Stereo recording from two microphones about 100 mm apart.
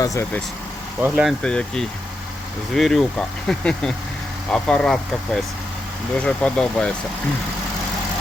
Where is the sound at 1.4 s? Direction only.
10° left (ahead or behind).